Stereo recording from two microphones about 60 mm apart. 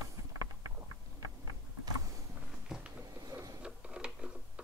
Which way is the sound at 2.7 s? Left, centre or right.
Centre.